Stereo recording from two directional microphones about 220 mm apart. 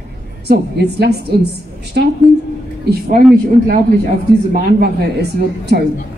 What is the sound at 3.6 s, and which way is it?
Speech, 35° right (ahead or behind).